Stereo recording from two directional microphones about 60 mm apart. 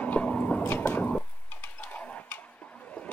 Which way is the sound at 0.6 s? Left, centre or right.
Left.